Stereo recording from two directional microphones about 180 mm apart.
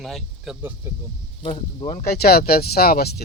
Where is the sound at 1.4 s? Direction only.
30° left (ahead or behind).